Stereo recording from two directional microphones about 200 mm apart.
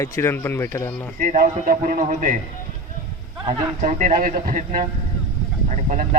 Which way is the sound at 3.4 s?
35° right (ahead or behind).